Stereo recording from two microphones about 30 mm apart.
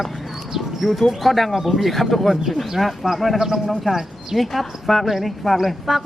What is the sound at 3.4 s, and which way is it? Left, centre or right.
Speech, centre.